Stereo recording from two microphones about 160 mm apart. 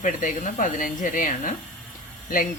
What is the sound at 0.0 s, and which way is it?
Speech, 55° left (ahead or behind).